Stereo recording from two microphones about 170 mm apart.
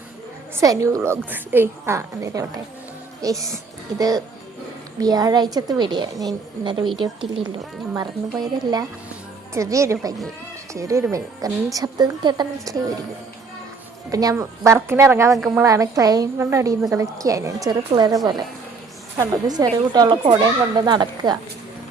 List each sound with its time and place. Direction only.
0.6 s a woman's voice: 20° right (ahead or behind)
3.2 s music: 20° right (ahead or behind)
3.9 s a woman's voice: 20° right (ahead or behind)
8.4 s a woman's voice: 25° right (ahead or behind)
14.1 s a woman's voice: 20° right (ahead or behind)
15.4 s a woman's voice: centre (ahead or behind)
15.6 s a woman's voice: 20° right (ahead or behind)